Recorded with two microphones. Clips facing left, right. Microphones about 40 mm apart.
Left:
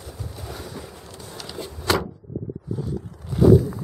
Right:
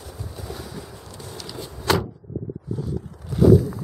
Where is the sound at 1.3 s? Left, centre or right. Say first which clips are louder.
Left 2 dB; centre.